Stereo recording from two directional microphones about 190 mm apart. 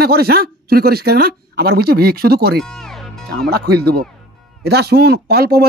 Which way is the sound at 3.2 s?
55° right (ahead or behind).